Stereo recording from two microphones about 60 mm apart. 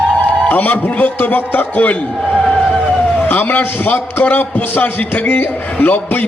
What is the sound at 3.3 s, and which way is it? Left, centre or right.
A man's voice, left.